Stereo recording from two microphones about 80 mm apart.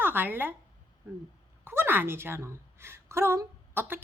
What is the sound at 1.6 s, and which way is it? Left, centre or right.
A woman's voice, right.